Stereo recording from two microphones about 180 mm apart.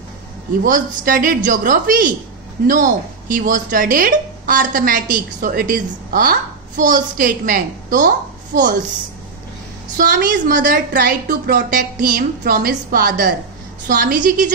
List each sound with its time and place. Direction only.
0.7 s speech: 50° right (ahead or behind)
9.9 s speech: 50° right (ahead or behind)
10.9 s speech: 60° right (ahead or behind)